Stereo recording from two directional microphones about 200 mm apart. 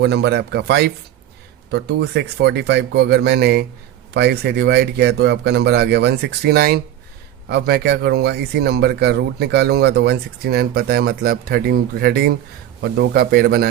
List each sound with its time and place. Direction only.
0.0 s a man's voice: 60° right (ahead or behind)